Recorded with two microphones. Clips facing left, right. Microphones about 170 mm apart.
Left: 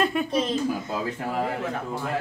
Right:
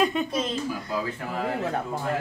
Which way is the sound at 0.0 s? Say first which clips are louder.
Even; 5° left (ahead or behind).